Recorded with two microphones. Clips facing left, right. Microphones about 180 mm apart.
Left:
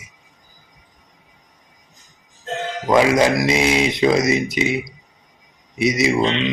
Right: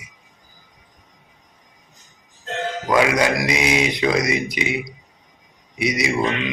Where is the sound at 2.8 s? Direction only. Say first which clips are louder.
Left 3 dB; 25° left (ahead or behind).